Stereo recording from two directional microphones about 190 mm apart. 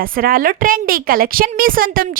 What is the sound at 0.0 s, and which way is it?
A woman's voice, 50° right (ahead or behind).